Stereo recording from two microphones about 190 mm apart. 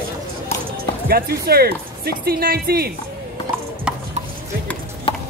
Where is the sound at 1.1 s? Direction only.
55° right (ahead or behind).